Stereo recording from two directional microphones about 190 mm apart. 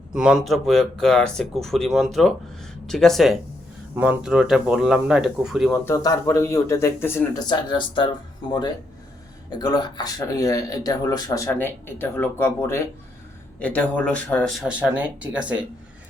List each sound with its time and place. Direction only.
0.1 s speech: 5° right (ahead or behind)
5.8 s speech: 15° left (ahead or behind)
7.4 s speech: 25° left (ahead or behind)
9.5 s speech: 20° left (ahead or behind); by 15.6 s 5° right (ahead or behind)